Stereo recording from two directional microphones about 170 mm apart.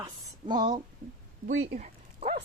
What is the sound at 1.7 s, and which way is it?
Dog, 40° right (ahead or behind).